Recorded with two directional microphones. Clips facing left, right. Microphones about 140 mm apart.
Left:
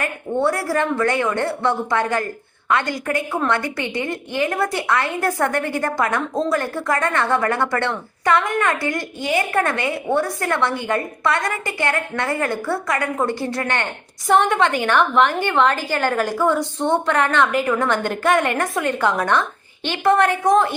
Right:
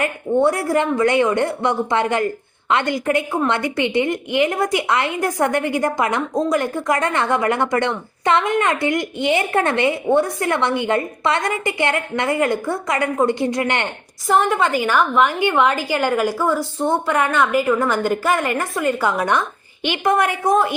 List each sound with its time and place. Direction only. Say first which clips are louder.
0.0 s a woman's voice: right 4 dB; 20° right (ahead or behind)
14.3 s a woman's voice: left 1 dB; centre (ahead or behind)